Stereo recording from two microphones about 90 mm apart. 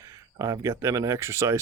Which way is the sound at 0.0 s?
35° right (ahead or behind).